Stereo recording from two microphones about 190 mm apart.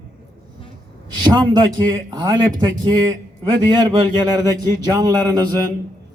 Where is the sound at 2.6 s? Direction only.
20° right (ahead or behind).